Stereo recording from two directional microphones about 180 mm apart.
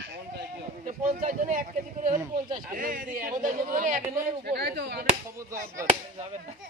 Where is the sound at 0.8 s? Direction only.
45° right (ahead or behind).